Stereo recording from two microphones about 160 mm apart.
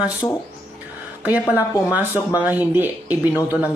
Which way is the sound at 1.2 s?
10° right (ahead or behind).